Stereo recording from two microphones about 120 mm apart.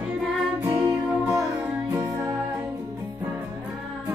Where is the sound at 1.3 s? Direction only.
20° right (ahead or behind).